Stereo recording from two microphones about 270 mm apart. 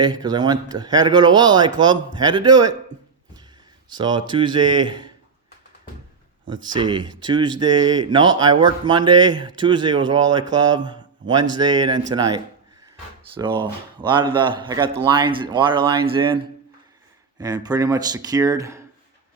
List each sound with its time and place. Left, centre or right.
0.0 s speech: centre
3.8 s speech: centre
6.5 s speech: centre
17.4 s speech: centre